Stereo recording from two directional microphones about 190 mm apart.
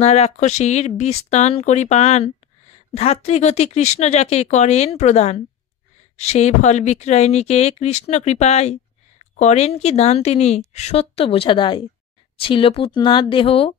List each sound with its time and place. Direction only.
0.0 s a woman's voice: 35° left (ahead or behind)